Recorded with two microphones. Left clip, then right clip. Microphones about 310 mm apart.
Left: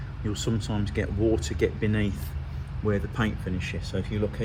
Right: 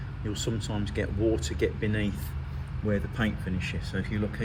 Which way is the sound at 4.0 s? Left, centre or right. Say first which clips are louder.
Left 1 dB; left.